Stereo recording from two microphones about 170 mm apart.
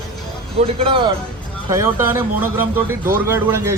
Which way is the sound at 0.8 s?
30° right (ahead or behind).